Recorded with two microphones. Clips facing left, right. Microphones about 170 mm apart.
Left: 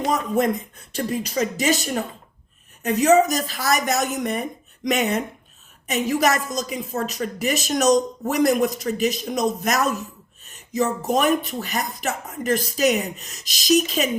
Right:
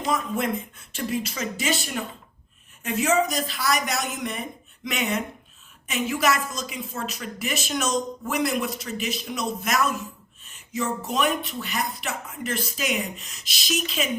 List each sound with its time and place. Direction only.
0.1 s a woman's voice: 40° left (ahead or behind)